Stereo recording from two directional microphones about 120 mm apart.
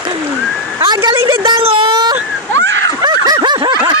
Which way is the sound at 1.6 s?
50° right (ahead or behind).